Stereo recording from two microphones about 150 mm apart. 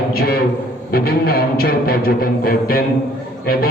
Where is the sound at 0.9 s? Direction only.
85° left.